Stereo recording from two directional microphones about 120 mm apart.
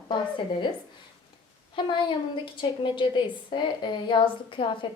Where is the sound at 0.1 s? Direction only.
40° left (ahead or behind).